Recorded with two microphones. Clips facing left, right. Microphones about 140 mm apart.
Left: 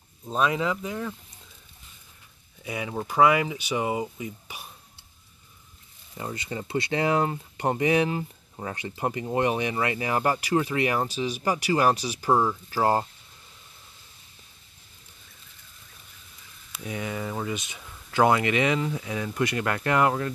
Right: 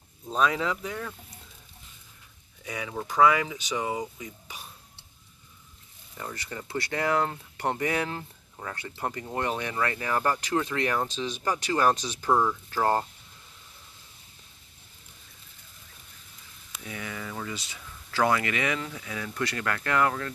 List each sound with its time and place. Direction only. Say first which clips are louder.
0.3 s speech: left 1 dB; 5° left (ahead or behind)
2.6 s speech: left 3 dB; 10° left (ahead or behind)
6.1 s speech: left 4 dB; 20° left (ahead or behind)
16.8 s speech: left 6 dB; 25° left (ahead or behind)